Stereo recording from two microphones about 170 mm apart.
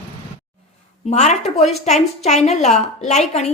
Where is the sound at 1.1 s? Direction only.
45° left (ahead or behind).